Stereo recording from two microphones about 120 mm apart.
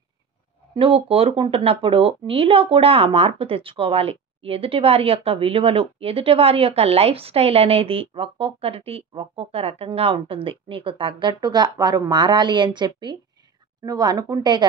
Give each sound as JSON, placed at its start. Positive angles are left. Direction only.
{"t": 0.7, "sound": "a woman's voice", "side_deg": -50}